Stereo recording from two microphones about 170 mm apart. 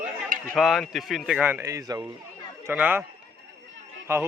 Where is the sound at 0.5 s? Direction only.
Centre (ahead or behind).